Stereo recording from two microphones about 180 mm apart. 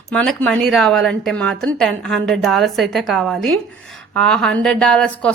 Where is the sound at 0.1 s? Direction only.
5° left (ahead or behind).